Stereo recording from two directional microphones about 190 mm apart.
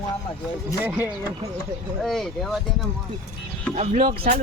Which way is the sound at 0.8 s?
10° right (ahead or behind).